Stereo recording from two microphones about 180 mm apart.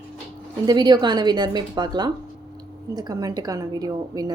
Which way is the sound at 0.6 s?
25° right (ahead or behind).